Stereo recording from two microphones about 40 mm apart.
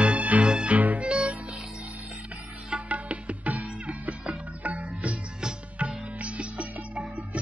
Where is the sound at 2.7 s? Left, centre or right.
Right.